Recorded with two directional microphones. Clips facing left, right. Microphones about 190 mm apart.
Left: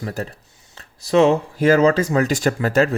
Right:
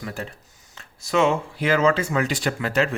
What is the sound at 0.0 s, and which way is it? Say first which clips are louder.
Speech: left 5 dB; 40° left (ahead or behind).